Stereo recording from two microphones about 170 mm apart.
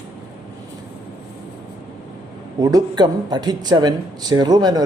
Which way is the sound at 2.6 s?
20° right (ahead or behind).